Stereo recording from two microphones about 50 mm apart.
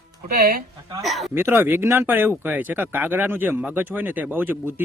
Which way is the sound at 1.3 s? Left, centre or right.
Right.